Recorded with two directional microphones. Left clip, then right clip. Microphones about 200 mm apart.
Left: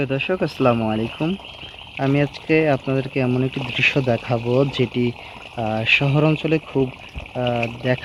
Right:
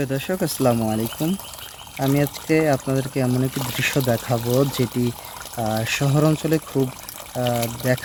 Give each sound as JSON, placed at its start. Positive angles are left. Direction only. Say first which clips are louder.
{"t": 0.0, "sound": "speech", "louder": "left 3 dB", "side_deg": -20}